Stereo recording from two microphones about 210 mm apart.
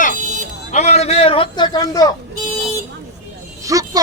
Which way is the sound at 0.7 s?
30° left (ahead or behind).